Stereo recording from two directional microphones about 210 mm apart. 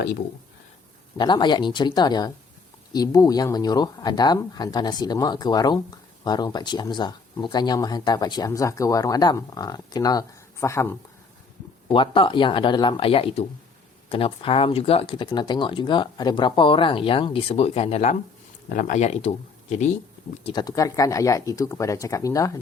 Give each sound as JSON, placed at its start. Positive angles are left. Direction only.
{"t": 1.2, "sound": "speech", "side_deg": 20}
{"t": 11.9, "sound": "speech", "side_deg": 25}
{"t": 20.4, "sound": "speech", "side_deg": 20}